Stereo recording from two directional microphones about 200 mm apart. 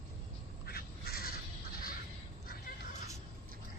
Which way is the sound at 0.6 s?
50° left (ahead or behind).